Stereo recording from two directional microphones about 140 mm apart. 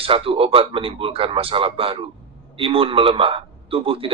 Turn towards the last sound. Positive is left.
turn(degrees=-40)  # may be behind; listen again after turning